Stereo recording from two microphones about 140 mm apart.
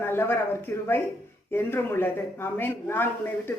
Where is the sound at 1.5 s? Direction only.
15° left (ahead or behind).